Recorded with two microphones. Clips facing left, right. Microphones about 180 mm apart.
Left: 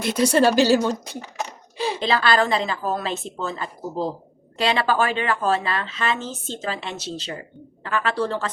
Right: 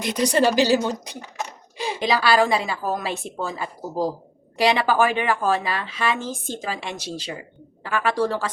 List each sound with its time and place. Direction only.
0.0 s a woman's voice: 15° right (ahead or behind)